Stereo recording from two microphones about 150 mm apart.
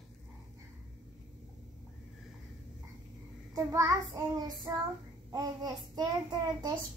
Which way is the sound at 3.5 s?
20° right (ahead or behind).